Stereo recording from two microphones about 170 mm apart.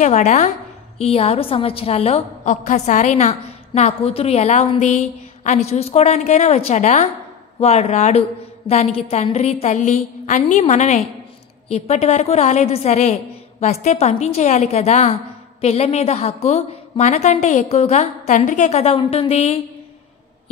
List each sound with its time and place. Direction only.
0.0 s a woman's voice: 45° left (ahead or behind)